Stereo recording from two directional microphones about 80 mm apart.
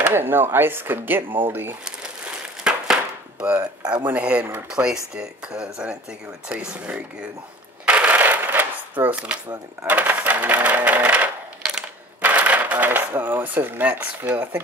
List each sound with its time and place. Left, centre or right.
0.0 s speech: right
2.6 s chop: centre
4.0 s speech: centre
7.8 s crushing: centre
9.0 s speech: centre